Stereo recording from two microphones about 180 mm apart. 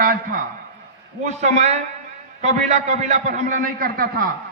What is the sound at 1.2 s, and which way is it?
A man's voice, 40° right (ahead or behind).